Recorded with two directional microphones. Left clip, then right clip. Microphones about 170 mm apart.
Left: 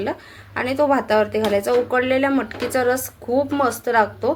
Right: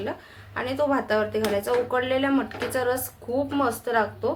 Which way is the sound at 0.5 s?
25° left (ahead or behind).